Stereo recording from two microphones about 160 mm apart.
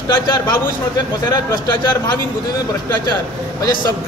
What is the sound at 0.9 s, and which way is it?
A man's voice, 25° left (ahead or behind).